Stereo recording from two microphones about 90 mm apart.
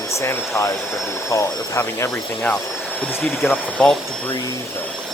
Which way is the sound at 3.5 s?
10° left (ahead or behind).